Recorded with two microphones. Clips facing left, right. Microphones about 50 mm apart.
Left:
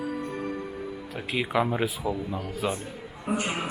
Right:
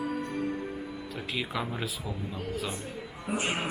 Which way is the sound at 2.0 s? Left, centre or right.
Left.